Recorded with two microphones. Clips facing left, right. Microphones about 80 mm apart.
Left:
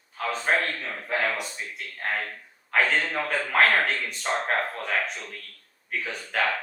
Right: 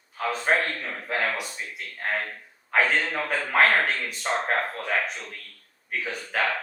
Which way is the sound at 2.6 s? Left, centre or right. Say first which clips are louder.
Right 1 dB; centre.